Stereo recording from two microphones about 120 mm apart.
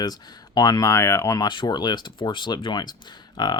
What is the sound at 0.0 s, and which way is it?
Speech, 35° left (ahead or behind).